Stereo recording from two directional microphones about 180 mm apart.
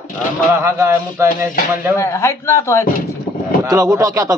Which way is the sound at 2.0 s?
15° left (ahead or behind).